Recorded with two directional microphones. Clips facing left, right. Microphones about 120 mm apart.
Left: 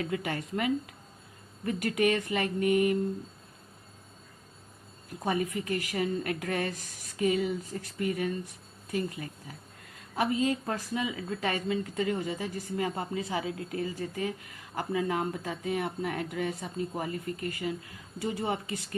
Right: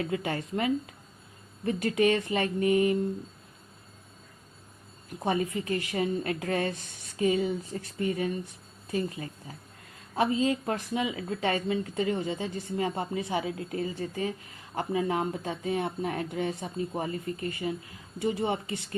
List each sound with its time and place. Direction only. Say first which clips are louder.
0.0 s a woman's voice: right 2 dB; 30° right (ahead or behind)
5.2 s a woman's voice: right 2 dB; 25° right (ahead or behind)
8.4 s a sound: right 3 dB; 30° right (ahead or behind)
10.8 s a woman's voice: right 2 dB; 20° right (ahead or behind)